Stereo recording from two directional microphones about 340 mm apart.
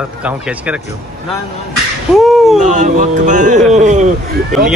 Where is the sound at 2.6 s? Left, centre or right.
Right.